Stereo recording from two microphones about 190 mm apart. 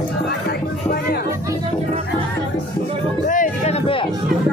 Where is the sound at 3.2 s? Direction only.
45° left (ahead or behind).